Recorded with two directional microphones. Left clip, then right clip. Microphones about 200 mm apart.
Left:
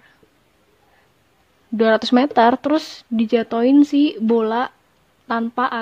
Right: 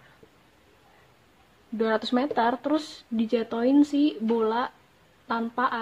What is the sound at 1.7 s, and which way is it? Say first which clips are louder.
A woman's voice: left 10 dB; 55° left (ahead or behind).